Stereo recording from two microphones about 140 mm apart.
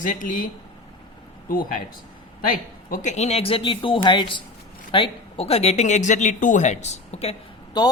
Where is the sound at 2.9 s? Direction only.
60° left (ahead or behind).